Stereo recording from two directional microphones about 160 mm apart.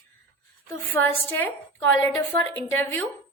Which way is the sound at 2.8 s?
15° left (ahead or behind).